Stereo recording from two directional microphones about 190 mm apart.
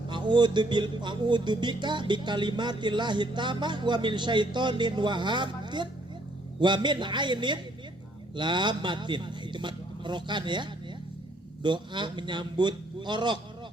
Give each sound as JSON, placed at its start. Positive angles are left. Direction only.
{"t": 0.1, "sound": "music", "side_deg": -25}
{"t": 8.4, "sound": "speech", "side_deg": -25}
{"t": 11.6, "sound": "music", "side_deg": -25}